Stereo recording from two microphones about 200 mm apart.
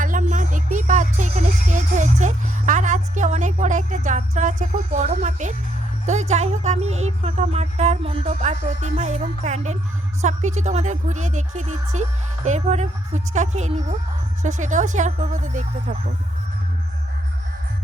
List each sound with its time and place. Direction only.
0.0 s music: 40° right (ahead or behind)
6.1 s speech: 35° right (ahead or behind)